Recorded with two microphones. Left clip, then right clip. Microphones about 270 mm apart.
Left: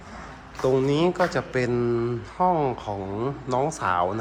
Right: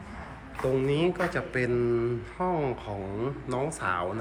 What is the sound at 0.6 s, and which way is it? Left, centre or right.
Speech, centre.